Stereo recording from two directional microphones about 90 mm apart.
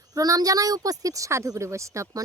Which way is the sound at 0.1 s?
45° right (ahead or behind).